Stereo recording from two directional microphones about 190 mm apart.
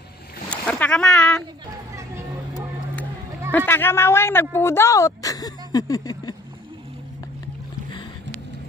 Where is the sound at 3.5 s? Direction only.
10° left (ahead or behind).